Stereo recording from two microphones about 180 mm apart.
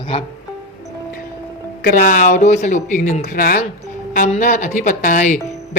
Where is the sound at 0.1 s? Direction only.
35° left (ahead or behind).